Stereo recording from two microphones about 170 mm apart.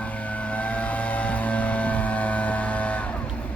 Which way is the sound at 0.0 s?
10° left (ahead or behind).